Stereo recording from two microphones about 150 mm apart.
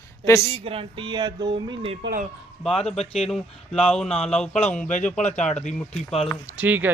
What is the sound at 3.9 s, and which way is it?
A man's voice, 5° left (ahead or behind).